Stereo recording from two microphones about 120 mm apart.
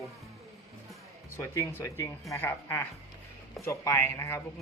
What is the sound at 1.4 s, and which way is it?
Speech, 25° left (ahead or behind).